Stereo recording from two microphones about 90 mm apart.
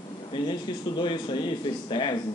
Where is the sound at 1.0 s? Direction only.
60° left (ahead or behind).